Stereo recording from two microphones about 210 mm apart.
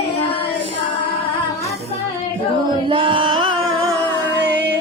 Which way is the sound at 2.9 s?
25° right (ahead or behind).